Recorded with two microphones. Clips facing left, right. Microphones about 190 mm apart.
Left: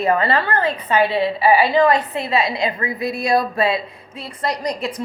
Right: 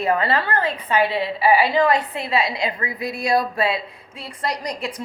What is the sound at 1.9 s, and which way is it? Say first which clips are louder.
A woman's voice: left 3 dB; 10° right (ahead or behind).